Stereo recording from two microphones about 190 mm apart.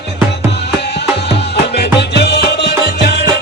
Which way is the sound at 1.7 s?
60° left (ahead or behind).